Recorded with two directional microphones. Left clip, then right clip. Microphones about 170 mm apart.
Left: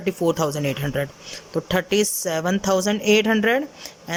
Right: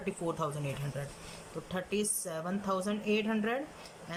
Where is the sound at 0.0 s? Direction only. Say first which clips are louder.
Left 14 dB; 45° left (ahead or behind).